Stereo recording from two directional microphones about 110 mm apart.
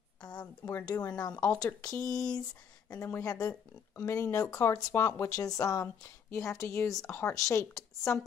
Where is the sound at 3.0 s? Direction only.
25° left (ahead or behind).